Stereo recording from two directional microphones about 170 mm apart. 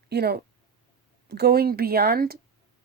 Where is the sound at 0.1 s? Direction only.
70° right (ahead or behind).